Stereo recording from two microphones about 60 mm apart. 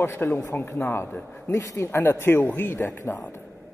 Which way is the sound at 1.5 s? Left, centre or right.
Left.